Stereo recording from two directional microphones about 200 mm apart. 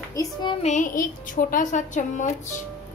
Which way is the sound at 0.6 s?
40° left (ahead or behind).